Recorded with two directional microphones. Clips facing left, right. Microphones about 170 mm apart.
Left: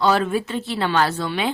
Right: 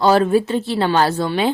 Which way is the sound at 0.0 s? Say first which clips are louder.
Right 5 dB; 35° right (ahead or behind).